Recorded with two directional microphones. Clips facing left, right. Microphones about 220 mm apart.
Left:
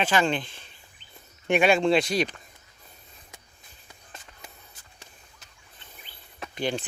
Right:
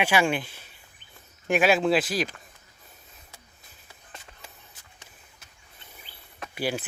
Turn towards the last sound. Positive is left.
turn(degrees=-5)  # may be behind; listen again after turning